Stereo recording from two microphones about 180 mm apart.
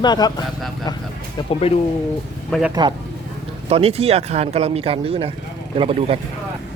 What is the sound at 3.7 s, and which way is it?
Speech, 35° right (ahead or behind).